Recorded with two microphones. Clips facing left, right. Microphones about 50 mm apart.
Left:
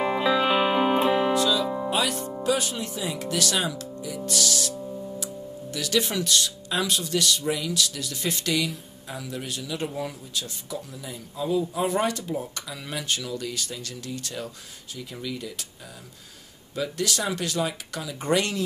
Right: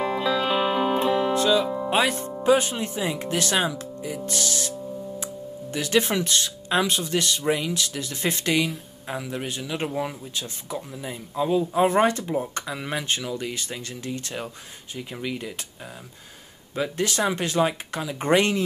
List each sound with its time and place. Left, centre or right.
0.0 s music: centre
1.3 s music: right
2.4 s speech: right
4.7 s music: centre
5.2 s speech: right
16.7 s speech: right